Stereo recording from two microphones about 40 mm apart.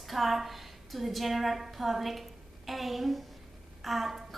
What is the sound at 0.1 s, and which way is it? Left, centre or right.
A woman's voice, centre.